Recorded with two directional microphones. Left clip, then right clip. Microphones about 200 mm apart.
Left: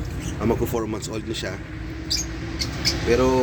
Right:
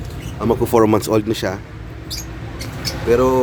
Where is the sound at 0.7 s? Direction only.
40° right (ahead or behind).